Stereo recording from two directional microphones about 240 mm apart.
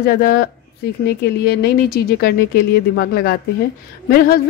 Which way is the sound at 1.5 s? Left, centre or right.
Left.